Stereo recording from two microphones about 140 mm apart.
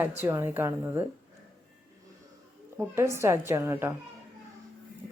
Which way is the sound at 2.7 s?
20° right (ahead or behind).